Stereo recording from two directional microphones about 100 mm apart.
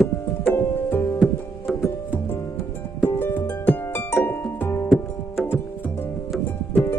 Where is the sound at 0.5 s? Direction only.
25° left (ahead or behind).